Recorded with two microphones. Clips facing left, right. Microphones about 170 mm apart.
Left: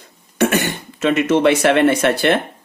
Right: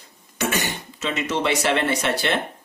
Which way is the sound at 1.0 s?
55° left (ahead or behind).